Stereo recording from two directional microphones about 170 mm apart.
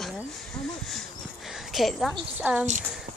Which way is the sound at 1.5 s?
Centre (ahead or behind).